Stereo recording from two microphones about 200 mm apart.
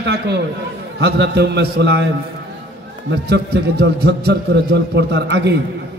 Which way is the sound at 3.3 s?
55° right (ahead or behind).